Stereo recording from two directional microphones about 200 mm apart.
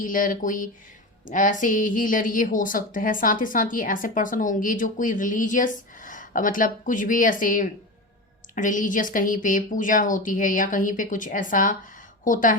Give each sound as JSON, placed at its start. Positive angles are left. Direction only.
{"t": 0.0, "sound": "a woman's voice", "side_deg": 45}